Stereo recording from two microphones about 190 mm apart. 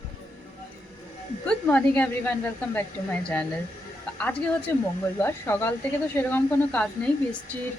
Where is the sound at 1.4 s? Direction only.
10° left (ahead or behind).